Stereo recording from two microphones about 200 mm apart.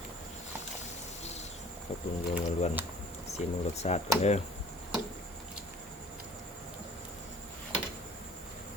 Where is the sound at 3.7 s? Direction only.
30° left (ahead or behind).